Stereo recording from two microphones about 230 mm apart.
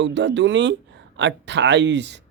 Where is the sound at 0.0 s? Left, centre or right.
Right.